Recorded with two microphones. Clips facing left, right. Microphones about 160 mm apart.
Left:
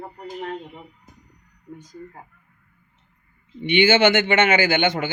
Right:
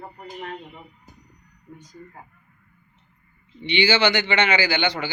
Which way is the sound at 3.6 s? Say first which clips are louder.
Left 4 dB; 50° left (ahead or behind).